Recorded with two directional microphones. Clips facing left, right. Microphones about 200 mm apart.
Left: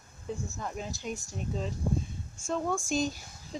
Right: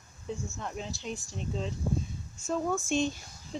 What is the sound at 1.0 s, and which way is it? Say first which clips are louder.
Speech: left 1 dB; 40° left (ahead or behind).